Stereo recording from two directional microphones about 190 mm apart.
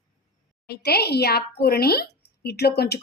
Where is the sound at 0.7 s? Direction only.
55° left (ahead or behind).